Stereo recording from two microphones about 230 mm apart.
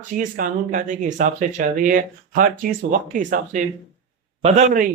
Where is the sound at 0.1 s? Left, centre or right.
Right.